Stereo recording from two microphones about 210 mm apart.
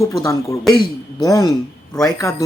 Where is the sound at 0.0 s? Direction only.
15° left (ahead or behind).